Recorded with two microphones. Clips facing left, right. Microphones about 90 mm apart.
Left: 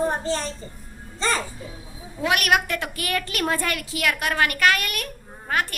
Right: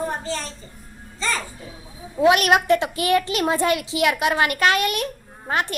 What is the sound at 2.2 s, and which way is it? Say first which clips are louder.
A woman's voice: right 5 dB; 25° right (ahead or behind).